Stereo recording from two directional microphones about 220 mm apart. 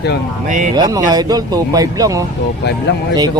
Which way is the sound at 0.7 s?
20° right (ahead or behind).